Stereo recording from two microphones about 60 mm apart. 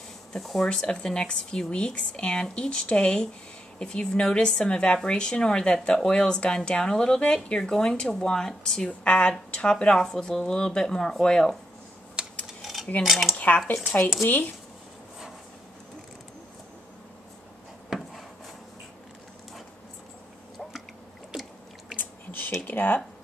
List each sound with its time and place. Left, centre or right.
0.3 s speech: centre
0.7 s speech: centre
8.8 s speech: centre
12.2 s a sound: centre
13.0 s speech: centre
13.7 s speech: left
17.8 s wood: centre
21.3 s a sound: centre
21.9 s squish: left
22.7 s speech: left